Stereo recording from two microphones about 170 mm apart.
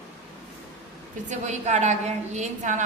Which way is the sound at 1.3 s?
45° right (ahead or behind).